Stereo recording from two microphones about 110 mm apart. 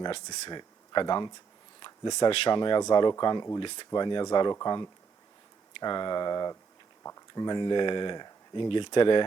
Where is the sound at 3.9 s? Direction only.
40° left (ahead or behind).